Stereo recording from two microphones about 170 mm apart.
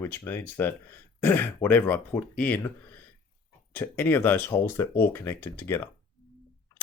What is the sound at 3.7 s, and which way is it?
Speech, 10° left (ahead or behind).